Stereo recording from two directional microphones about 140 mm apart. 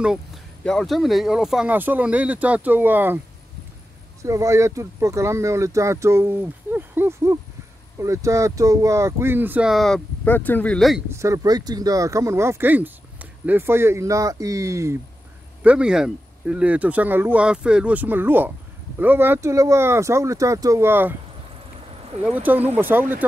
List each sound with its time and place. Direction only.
0.0 s speech: 5° right (ahead or behind)
4.2 s speech: 20° right (ahead or behind)
9.7 s speech: centre (ahead or behind)
11.1 s speech: 20° right (ahead or behind)
15.6 s speech: 10° right (ahead or behind)
22.2 s speech: 10° right (ahead or behind)